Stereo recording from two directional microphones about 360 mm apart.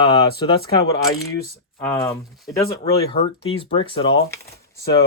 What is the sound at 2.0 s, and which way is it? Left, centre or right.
Speech, centre.